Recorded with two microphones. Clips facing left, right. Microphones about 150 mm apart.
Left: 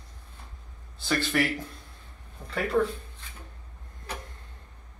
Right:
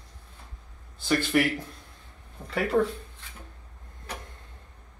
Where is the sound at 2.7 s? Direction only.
25° right (ahead or behind).